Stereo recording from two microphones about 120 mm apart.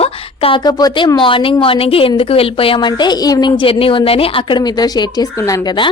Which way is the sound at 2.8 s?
40° left (ahead or behind).